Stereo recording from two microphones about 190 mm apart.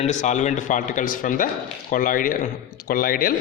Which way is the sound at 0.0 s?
40° left (ahead or behind).